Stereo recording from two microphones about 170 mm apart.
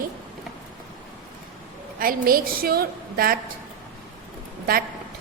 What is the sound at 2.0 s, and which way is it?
A woman's voice, 55° right (ahead or behind).